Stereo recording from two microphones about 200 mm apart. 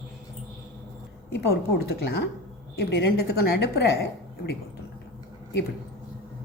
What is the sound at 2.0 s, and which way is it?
A woman's voice, 55° left (ahead or behind).